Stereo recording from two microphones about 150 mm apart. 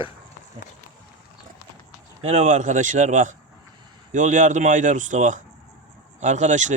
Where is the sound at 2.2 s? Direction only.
50° right (ahead or behind).